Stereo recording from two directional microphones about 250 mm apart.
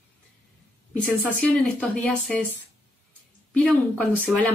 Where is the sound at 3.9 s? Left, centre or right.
Centre.